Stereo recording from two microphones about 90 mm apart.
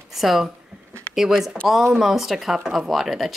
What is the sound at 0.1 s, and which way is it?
Speech, 5° right (ahead or behind).